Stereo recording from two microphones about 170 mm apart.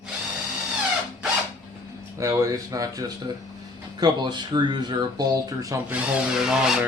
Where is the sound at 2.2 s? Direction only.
15° right (ahead or behind).